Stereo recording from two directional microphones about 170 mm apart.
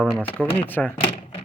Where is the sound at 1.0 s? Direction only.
35° left (ahead or behind).